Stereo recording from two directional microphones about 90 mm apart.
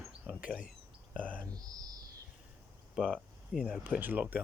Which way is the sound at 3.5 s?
15° right (ahead or behind).